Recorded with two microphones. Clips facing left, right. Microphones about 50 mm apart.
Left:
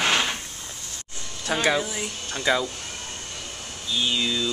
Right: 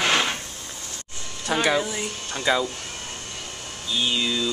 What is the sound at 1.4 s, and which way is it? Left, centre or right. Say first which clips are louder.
Speech: right 1 dB; centre.